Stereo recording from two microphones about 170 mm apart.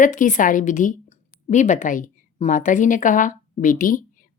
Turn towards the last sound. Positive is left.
turn(degrees=55)  # may be behind; listen again after turning